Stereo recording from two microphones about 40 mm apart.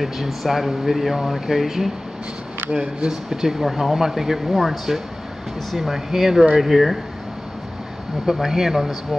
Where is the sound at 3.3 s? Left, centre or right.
Centre.